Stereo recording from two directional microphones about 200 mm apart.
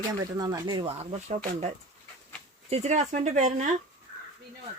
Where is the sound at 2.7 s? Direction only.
35° right (ahead or behind).